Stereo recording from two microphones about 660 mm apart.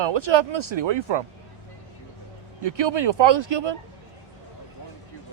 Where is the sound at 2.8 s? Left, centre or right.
Right.